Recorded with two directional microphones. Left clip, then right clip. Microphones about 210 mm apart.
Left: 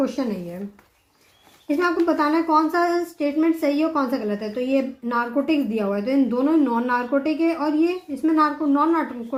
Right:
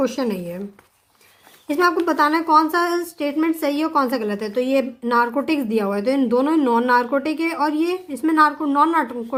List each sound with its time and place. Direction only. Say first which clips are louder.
0.0 s a woman's voice: right 3 dB; 30° right (ahead or behind)
1.6 s a woman's voice: right 2 dB; 35° right (ahead or behind)